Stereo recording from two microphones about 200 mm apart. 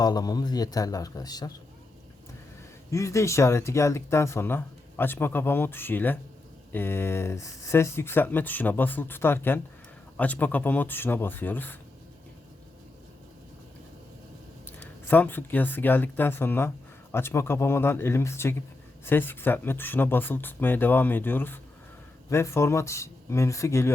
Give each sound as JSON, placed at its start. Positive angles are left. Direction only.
{"t": 0.0, "sound": "a man's voice", "side_deg": 20}
{"t": 2.9, "sound": "speech", "side_deg": 15}
{"t": 14.7, "sound": "speech", "side_deg": 10}